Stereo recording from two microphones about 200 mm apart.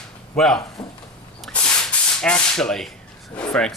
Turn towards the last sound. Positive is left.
turn(degrees=5)  # may be behind; listen again after turning